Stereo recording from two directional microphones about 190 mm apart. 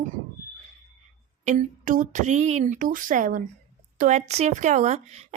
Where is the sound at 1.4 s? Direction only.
45° right (ahead or behind).